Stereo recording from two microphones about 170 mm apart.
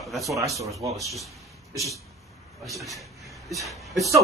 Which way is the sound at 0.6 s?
20° right (ahead or behind).